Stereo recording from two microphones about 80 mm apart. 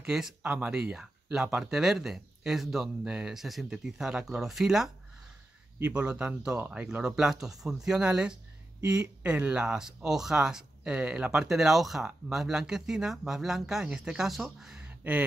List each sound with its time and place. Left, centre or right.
0.0 s speech: centre
5.8 s speech: centre
14.9 s a sound: centre